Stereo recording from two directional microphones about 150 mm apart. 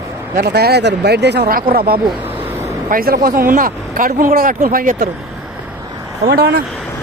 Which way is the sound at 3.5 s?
65° right (ahead or behind).